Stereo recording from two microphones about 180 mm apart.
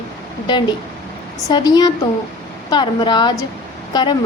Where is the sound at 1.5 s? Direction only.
20° left (ahead or behind).